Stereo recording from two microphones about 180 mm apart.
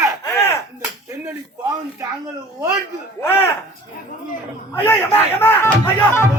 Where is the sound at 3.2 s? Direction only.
10° left (ahead or behind).